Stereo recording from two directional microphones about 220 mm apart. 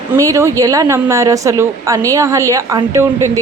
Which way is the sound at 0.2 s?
15° right (ahead or behind).